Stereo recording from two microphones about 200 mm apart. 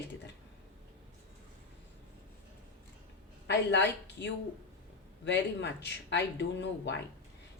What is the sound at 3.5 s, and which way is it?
A woman's voice, 60° left (ahead or behind).